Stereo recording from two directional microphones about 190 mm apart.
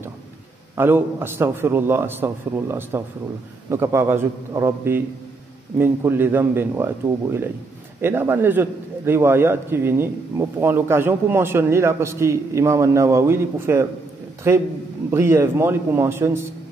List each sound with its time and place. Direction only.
0.7 s a man's voice: 10° right (ahead or behind)